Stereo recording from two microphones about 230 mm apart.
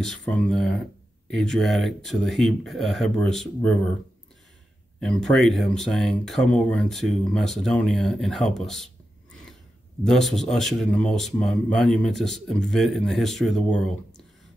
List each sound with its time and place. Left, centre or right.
0.0 s speech: centre
5.0 s speech: centre
10.0 s speech: centre